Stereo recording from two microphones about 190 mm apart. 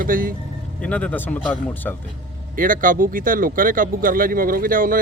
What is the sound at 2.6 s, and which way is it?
Speech, 45° right (ahead or behind).